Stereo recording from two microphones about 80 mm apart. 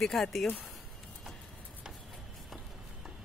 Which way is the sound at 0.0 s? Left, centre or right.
Centre.